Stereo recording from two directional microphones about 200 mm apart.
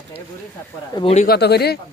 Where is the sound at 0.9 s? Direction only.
25° left (ahead or behind).